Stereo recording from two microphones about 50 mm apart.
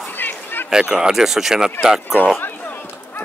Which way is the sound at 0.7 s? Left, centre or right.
Centre.